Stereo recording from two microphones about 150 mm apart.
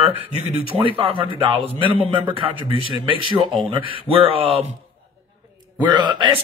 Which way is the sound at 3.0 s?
35° right (ahead or behind).